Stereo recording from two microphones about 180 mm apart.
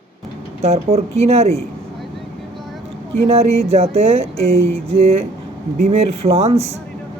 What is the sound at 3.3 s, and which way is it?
Speech, 35° right (ahead or behind).